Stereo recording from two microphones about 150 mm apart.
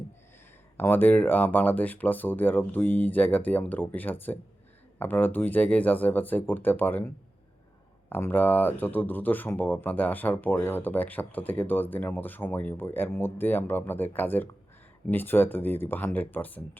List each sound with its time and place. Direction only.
0.8 s speech: 10° left (ahead or behind)
8.1 s speech: 15° left (ahead or behind)